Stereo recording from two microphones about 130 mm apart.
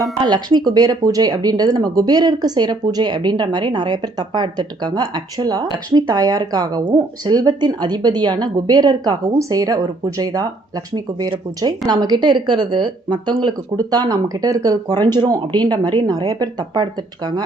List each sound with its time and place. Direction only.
0.3 s speech: 35° right (ahead or behind)